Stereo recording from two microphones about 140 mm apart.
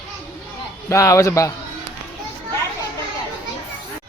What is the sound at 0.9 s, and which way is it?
Speech, 20° left (ahead or behind).